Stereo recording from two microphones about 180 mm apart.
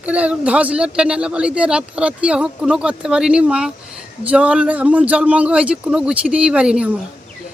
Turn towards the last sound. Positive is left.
turn(degrees=-5)  # may be behind; listen again after turning